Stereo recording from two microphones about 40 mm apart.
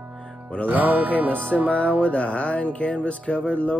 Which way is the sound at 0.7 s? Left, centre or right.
Right.